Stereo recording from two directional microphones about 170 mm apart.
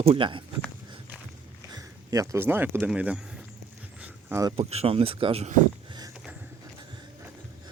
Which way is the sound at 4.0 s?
10° right (ahead or behind).